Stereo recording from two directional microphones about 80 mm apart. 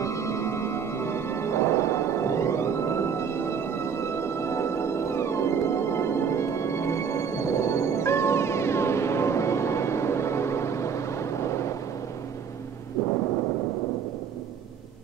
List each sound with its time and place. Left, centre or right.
0.0 s music: left